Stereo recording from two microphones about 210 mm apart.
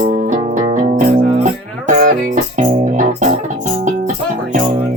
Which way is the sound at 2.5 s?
35° right (ahead or behind).